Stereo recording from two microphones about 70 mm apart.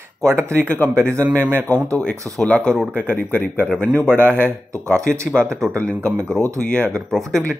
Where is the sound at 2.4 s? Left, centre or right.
Centre.